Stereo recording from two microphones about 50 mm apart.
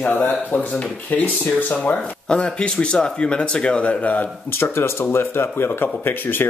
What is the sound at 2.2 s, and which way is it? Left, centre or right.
Speech, left.